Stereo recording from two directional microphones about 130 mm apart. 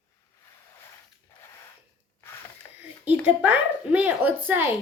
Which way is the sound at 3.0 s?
15° right (ahead or behind).